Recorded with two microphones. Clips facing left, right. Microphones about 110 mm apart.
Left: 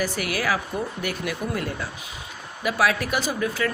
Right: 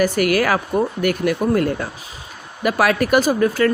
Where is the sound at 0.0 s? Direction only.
55° right (ahead or behind).